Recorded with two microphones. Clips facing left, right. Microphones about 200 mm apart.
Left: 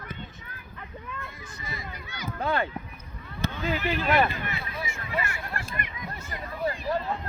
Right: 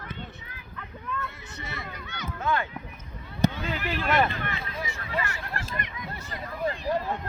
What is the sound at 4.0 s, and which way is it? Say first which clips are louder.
Speech: right 1 dB; 5° left (ahead or behind).